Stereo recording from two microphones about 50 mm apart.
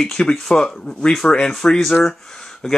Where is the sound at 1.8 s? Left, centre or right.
Centre.